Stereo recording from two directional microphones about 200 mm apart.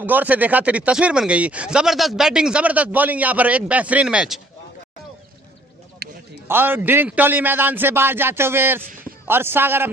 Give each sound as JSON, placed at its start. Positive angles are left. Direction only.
{"t": 0.0, "sound": "speech", "side_deg": -10}
{"t": 6.0, "sound": "a sound", "side_deg": -50}
{"t": 6.5, "sound": "speech", "side_deg": -10}